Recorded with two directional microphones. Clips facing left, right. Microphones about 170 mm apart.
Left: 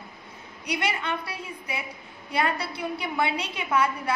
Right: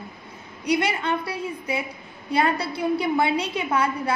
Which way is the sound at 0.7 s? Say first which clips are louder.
Right 6 dB; 40° right (ahead or behind).